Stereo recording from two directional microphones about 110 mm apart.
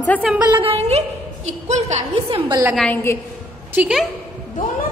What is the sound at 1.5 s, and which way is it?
Speech, 90° right.